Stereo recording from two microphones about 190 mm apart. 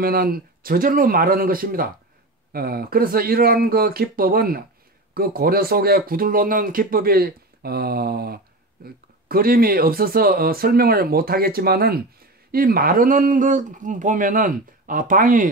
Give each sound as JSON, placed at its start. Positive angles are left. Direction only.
{"t": 0.0, "sound": "speech", "side_deg": -50}